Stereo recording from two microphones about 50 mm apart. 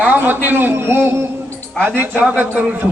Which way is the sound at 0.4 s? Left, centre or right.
Right.